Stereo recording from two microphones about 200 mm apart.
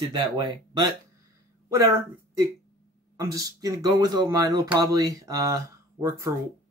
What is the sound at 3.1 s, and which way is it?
Speech, 15° right (ahead or behind).